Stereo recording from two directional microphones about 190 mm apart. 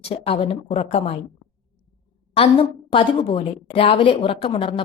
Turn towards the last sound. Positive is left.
turn(degrees=30)  # may be behind; listen again after turning